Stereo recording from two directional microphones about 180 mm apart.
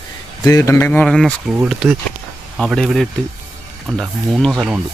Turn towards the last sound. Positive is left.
turn(degrees=0)  # may be behind; listen again after turning